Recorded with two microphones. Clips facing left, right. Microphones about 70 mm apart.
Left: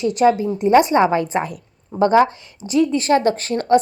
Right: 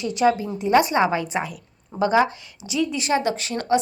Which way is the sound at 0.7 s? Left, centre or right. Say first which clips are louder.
Left 4 dB; left.